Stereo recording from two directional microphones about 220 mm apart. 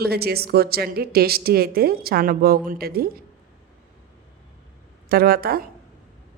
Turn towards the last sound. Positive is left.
turn(degrees=-45)  # may be behind; listen again after turning